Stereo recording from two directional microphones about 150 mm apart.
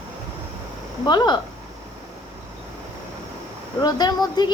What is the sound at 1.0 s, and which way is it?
Speech, 30° left (ahead or behind).